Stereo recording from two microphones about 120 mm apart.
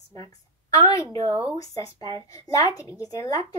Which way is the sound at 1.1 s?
50° right (ahead or behind).